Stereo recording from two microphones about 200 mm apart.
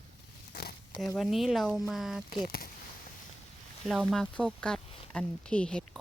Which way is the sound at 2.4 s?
45° left (ahead or behind).